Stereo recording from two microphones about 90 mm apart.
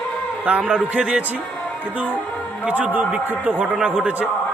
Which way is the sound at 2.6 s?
15° right (ahead or behind).